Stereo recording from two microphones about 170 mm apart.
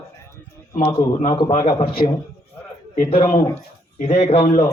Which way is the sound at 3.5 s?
40° left (ahead or behind).